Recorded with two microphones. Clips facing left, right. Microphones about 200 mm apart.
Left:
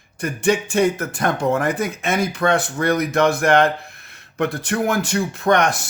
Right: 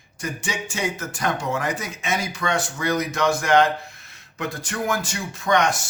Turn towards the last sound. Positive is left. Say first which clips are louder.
# left 3 dB
turn(degrees=60)  # may be behind; listen again after turning